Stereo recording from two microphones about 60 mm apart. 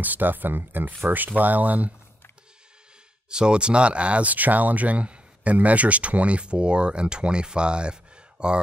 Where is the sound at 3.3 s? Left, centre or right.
Centre.